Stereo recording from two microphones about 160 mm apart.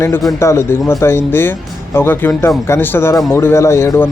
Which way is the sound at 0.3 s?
15° left (ahead or behind).